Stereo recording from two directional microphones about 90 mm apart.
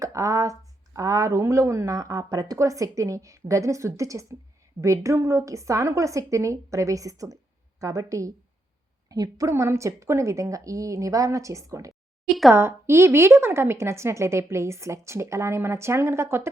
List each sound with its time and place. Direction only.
0.0 s a sound: 35° right (ahead or behind)
0.9 s a woman's voice: 35° right (ahead or behind)
12.2 s speech: centre (ahead or behind)
12.5 s a woman's voice: 30° right (ahead or behind)